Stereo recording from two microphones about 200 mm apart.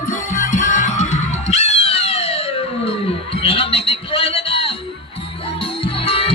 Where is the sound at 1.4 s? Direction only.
35° left (ahead or behind).